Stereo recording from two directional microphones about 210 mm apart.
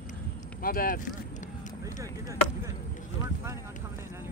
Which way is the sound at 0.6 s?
45° left (ahead or behind).